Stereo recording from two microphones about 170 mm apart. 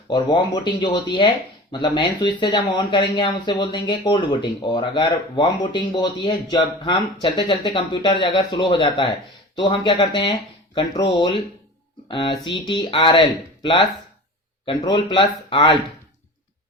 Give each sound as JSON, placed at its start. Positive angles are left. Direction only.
{"t": 0.1, "sound": "speech", "side_deg": 25}